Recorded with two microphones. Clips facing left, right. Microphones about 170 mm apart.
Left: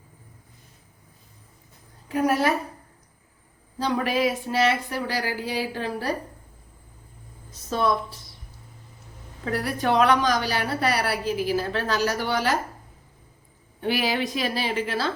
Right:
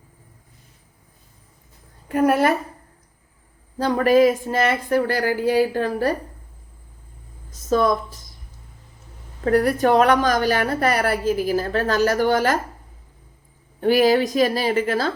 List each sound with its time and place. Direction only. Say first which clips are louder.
2.0 s a woman's voice: right 5 dB; 55° right (ahead or behind)
3.8 s a woman's voice: right 8 dB; 45° right (ahead or behind)
7.7 s a woman's voice: right 5 dB; 45° right (ahead or behind)
9.4 s a woman's voice: right 9 dB; 45° right (ahead or behind)
13.8 s a woman's voice: right 9 dB; 45° right (ahead or behind)